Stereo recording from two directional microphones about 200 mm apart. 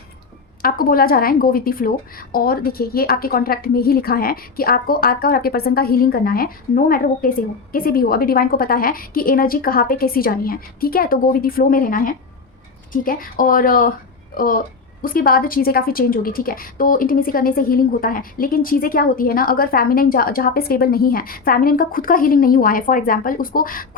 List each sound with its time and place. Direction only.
0.6 s a woman's voice: 45° left (ahead or behind)